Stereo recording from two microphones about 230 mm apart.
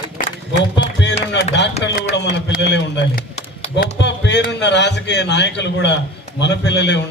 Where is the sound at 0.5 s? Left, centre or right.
Left.